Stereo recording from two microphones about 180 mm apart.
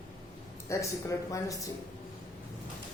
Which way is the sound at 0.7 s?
15° left (ahead or behind).